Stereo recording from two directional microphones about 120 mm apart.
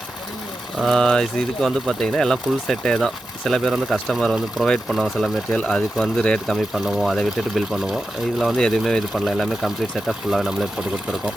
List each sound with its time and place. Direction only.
0.8 s speech: centre (ahead or behind)